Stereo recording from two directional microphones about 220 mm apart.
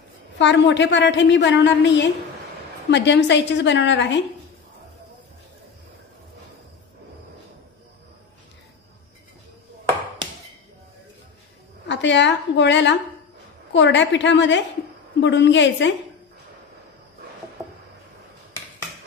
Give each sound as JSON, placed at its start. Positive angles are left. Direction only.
{"t": 0.4, "sound": "a woman's voice", "side_deg": 55}
{"t": 11.9, "sound": "a woman's voice", "side_deg": 55}